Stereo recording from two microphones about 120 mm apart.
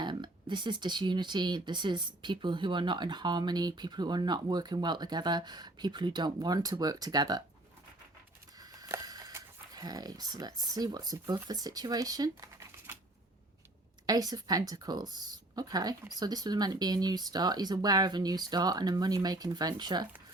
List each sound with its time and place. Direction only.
0.0 s speech: 40° right (ahead or behind)
8.5 s a sound: 30° right (ahead or behind)
11.4 s speech: 30° right (ahead or behind)
14.1 s speech: 30° right (ahead or behind)